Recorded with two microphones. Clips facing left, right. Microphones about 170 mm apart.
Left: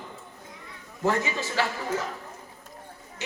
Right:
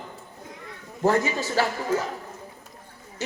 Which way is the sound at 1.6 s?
40° right (ahead or behind).